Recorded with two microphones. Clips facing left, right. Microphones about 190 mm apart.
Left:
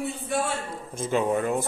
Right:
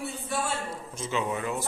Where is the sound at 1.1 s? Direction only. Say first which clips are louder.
Left 6 dB; 50° left (ahead or behind).